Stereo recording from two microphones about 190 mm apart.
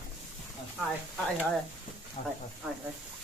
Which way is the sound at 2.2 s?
40° left (ahead or behind).